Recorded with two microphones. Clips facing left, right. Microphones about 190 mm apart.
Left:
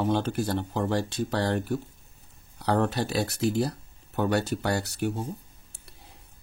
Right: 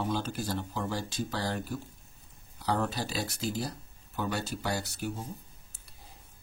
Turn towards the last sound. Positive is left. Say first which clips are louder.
# left 7 dB
turn(degrees=65)  # may be behind; listen again after turning